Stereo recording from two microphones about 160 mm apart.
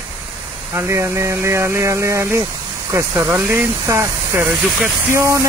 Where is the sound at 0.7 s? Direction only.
15° right (ahead or behind).